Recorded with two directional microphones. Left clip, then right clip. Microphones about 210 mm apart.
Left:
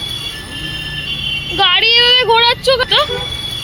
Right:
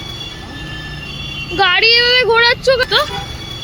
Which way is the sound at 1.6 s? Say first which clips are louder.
Even; 20° right (ahead or behind).